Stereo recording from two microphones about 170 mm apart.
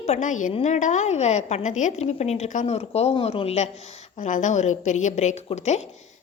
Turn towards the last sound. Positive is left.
turn(degrees=40)  # may be behind; listen again after turning